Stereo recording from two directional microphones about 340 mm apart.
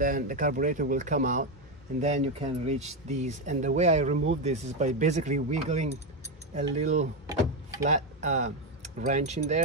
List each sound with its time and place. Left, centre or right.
0.0 s speech: right